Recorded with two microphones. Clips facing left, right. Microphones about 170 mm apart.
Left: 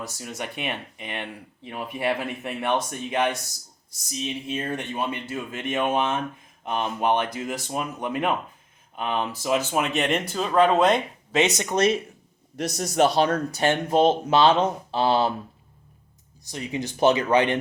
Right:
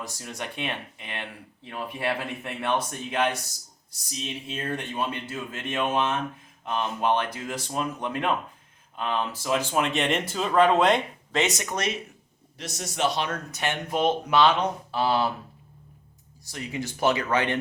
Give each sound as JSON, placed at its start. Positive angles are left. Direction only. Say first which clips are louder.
{"t": 0.0, "sound": "speech", "louder": "left 2 dB", "side_deg": 5}
{"t": 4.4, "sound": "speech", "louder": "left 3 dB", "side_deg": 15}
{"t": 11.3, "sound": "speech", "louder": "left 5 dB", "side_deg": 25}
{"t": 12.7, "sound": "speech", "louder": "left 6 dB", "side_deg": 40}
{"t": 16.5, "sound": "speech", "louder": "left 3 dB", "side_deg": 20}